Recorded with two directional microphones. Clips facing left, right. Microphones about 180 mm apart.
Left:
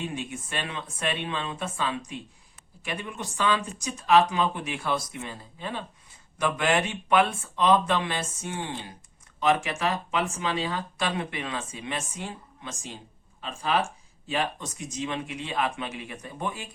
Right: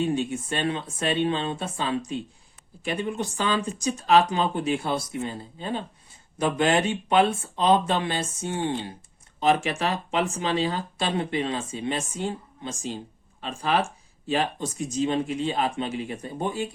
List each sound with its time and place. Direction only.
0.1 s speech: 30° right (ahead or behind)